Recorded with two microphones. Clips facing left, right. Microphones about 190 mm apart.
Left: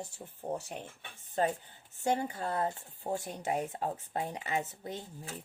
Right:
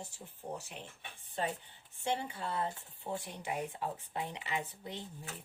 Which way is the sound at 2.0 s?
40° left (ahead or behind).